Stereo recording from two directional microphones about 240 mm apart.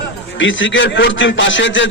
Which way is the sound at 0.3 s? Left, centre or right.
Left.